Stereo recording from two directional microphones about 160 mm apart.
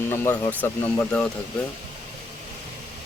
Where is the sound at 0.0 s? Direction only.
15° left (ahead or behind).